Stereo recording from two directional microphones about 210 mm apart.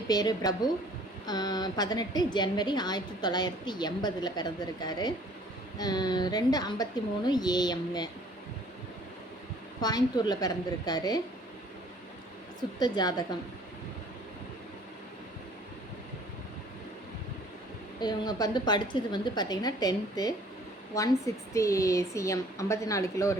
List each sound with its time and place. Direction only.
0.1 s a woman's voice: 20° left (ahead or behind)
9.8 s a woman's voice: 20° left (ahead or behind)
12.8 s a woman's voice: 20° left (ahead or behind)
18.0 s a woman's voice: 20° left (ahead or behind)